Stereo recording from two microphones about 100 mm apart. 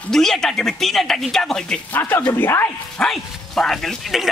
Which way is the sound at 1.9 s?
20° left (ahead or behind).